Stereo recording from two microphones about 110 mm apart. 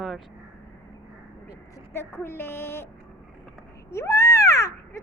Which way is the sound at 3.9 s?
25° left (ahead or behind).